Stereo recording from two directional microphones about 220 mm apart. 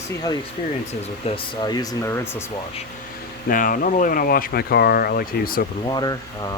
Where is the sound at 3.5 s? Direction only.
40° left (ahead or behind).